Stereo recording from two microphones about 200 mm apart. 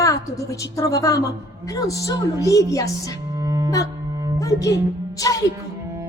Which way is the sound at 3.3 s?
15° right (ahead or behind).